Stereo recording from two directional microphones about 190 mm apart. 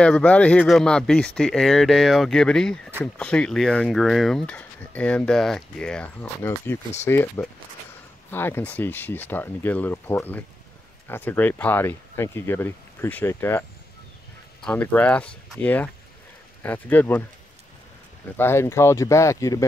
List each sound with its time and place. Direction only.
0.0 s speech: 5° left (ahead or behind)
18.3 s speech: 10° left (ahead or behind)